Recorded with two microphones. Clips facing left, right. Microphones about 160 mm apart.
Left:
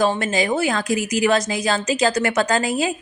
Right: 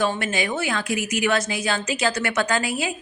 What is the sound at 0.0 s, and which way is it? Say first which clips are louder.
A woman's voice: left 4 dB; 35° left (ahead or behind).